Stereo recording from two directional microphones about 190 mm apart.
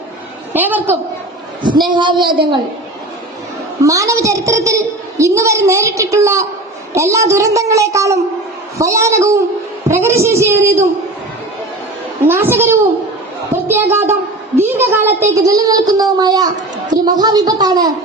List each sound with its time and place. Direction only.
0.5 s a woman's voice: 10° right (ahead or behind)
1.6 s speech: 25° right (ahead or behind)
3.8 s a woman's voice: 15° right (ahead or behind)
12.3 s a woman's voice: 10° right (ahead or behind)
13.7 s a sound: 10° right (ahead or behind)
15.4 s speech: 20° right (ahead or behind)